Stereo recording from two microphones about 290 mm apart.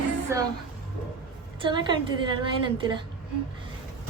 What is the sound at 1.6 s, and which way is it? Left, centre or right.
A woman's voice, centre.